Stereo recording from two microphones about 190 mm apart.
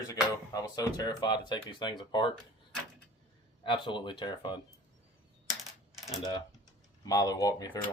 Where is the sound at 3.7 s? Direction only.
25° left (ahead or behind).